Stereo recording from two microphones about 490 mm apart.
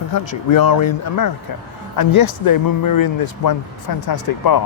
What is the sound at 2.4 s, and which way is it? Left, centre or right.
Speech, left.